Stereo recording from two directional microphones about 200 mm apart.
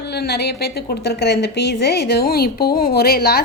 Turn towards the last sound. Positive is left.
turn(degrees=50)  # may be behind; listen again after turning